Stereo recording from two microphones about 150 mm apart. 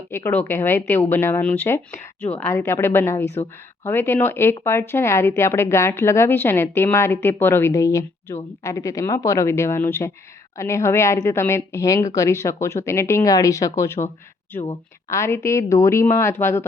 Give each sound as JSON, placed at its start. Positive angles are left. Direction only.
{"t": 0.1, "sound": "speech", "side_deg": 15}
{"t": 15.1, "sound": "speech", "side_deg": 20}